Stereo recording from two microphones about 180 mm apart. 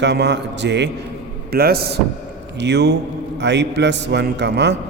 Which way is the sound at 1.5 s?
60° right (ahead or behind).